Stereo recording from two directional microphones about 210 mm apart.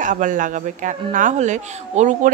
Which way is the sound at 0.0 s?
40° right (ahead or behind).